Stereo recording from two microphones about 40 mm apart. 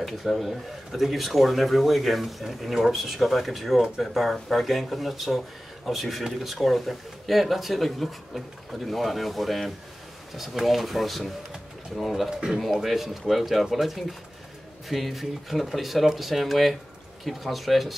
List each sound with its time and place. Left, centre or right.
0.0 s speech: centre
12.3 s speech: centre
12.5 s speech: centre